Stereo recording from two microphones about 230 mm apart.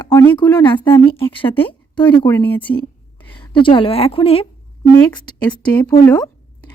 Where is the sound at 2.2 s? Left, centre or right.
Centre.